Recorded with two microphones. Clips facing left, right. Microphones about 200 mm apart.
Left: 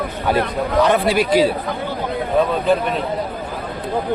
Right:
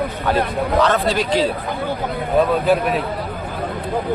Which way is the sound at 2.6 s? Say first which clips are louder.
Right 1 dB; 5° right (ahead or behind).